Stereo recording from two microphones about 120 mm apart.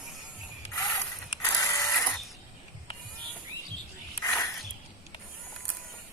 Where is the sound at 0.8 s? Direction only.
25° left (ahead or behind).